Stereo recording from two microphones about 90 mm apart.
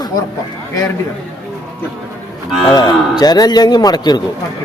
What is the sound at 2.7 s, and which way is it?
Speech, 50° left (ahead or behind).